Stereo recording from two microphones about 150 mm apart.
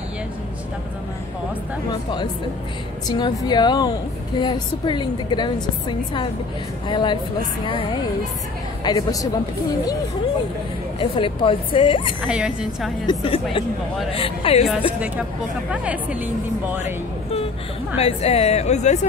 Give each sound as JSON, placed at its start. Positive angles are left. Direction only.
{"t": 3.1, "sound": "a woman's voice", "side_deg": 30}
{"t": 11.0, "sound": "a woman's voice", "side_deg": 35}
{"t": 12.3, "sound": "a woman's voice", "side_deg": -5}
{"t": 13.0, "sound": "a woman's voice", "side_deg": 30}
{"t": 15.7, "sound": "a woman's voice", "side_deg": -10}
{"t": 16.8, "sound": "a sound", "side_deg": 40}
{"t": 17.9, "sound": "a woman's voice", "side_deg": 40}